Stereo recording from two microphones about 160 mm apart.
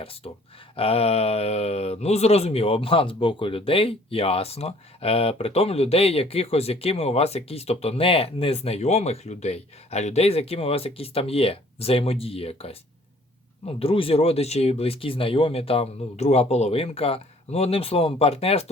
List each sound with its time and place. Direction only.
0.8 s speech: 40° left (ahead or behind)